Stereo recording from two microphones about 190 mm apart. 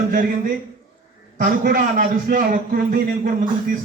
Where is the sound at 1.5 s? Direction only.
50° right (ahead or behind).